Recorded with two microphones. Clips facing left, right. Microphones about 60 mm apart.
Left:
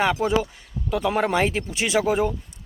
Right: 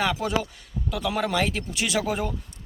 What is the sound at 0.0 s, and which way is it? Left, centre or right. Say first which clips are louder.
Speech: left 4 dB; left.